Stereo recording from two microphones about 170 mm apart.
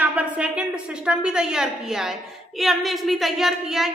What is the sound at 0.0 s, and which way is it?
A woman's voice, 10° right (ahead or behind).